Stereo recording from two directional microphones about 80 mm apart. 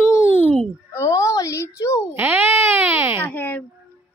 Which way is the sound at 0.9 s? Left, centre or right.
Left.